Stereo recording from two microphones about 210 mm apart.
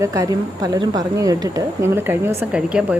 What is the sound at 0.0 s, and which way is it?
A woman's voice, 15° right (ahead or behind).